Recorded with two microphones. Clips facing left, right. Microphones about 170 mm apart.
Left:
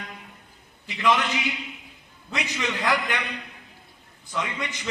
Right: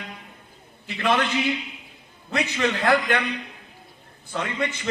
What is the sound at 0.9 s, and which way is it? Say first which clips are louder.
Speech: even; 55° right (ahead or behind).